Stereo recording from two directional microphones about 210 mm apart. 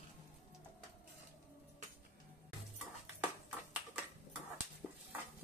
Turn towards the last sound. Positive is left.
turn(degrees=0)  # may be behind; listen again after turning